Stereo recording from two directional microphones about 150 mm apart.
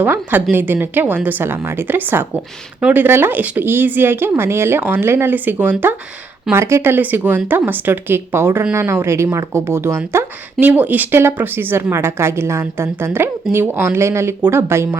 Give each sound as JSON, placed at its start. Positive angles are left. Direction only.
{"t": 0.0, "sound": "speech", "side_deg": -10}